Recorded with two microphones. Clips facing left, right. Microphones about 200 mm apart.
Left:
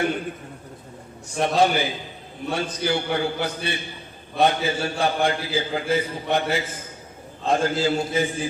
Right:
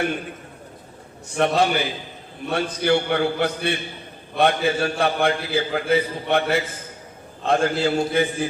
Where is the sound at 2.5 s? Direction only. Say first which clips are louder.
Right 4 dB; 60° right (ahead or behind).